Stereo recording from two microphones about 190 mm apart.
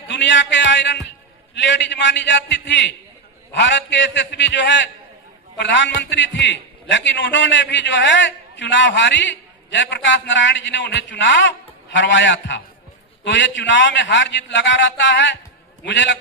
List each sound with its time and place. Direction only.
0.1 s a man's voice: 70° left (ahead or behind)